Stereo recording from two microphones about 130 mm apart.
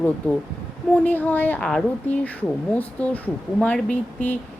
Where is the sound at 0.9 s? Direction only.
15° left (ahead or behind).